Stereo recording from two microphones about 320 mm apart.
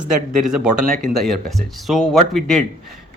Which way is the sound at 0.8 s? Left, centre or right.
Right.